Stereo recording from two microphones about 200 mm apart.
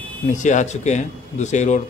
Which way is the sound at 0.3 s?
40° left (ahead or behind).